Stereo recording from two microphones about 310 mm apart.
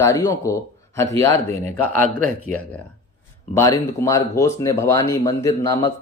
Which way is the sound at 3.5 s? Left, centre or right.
Centre.